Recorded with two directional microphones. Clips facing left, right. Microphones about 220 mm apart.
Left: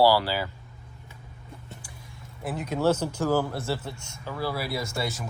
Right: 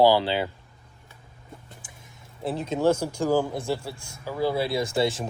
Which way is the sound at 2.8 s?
10° right (ahead or behind).